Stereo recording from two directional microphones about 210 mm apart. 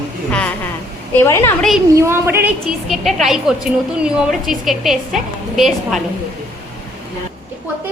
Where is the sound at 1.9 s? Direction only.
10° right (ahead or behind).